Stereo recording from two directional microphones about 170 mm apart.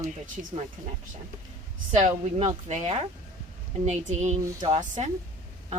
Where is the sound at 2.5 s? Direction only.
45° right (ahead or behind).